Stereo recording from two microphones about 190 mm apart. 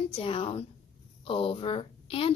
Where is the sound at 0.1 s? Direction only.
30° left (ahead or behind).